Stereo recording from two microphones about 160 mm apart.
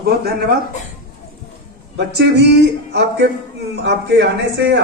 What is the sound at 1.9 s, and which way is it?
Speech, 90° right.